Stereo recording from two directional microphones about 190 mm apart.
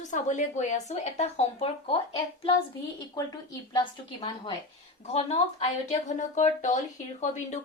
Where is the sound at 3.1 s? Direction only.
20° left (ahead or behind).